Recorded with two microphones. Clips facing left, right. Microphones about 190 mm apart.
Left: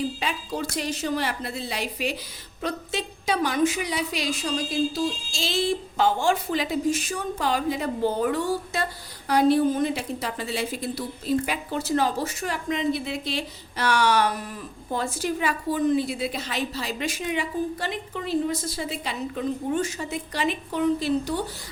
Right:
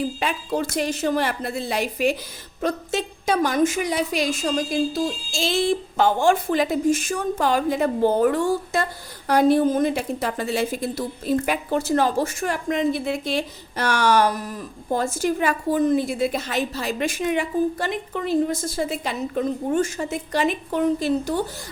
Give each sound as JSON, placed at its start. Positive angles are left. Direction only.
{"t": 0.2, "sound": "a woman's voice", "side_deg": -55}